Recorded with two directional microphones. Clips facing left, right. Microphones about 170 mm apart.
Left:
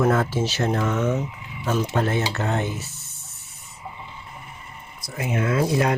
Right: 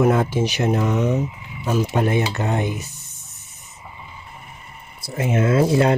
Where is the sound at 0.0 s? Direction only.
15° right (ahead or behind).